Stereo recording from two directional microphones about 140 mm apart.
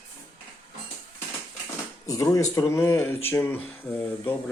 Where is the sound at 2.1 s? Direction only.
25° left (ahead or behind).